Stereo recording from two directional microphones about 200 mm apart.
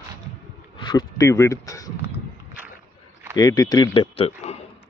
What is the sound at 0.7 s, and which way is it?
Speech, 20° left (ahead or behind).